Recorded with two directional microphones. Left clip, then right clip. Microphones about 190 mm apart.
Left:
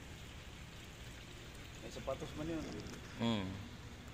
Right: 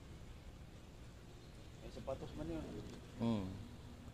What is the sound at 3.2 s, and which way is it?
Speech, 10° right (ahead or behind).